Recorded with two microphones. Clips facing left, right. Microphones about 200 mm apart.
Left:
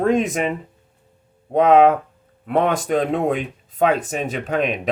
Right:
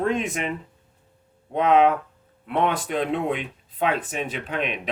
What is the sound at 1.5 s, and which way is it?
Speech, 40° left (ahead or behind).